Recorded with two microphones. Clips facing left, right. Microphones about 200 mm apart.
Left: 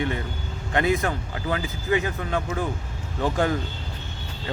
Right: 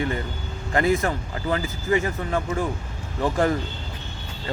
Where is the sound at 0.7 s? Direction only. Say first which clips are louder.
Right 2 dB; centre (ahead or behind).